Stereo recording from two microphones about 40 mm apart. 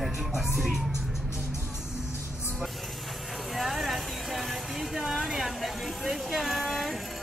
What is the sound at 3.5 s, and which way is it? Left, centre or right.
Music, centre.